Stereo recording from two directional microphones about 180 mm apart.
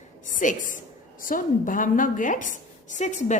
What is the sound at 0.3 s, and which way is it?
A woman's voice, 45° left (ahead or behind).